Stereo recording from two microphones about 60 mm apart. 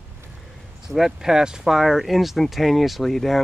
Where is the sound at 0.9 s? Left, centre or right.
Centre.